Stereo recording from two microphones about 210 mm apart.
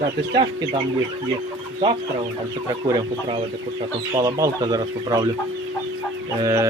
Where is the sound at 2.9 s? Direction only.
20° right (ahead or behind).